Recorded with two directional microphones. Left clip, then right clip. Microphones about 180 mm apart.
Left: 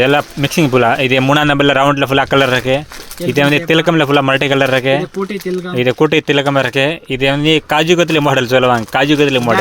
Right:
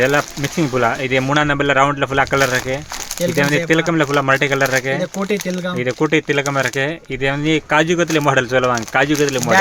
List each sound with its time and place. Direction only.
0.0 s speech: 45° left (ahead or behind)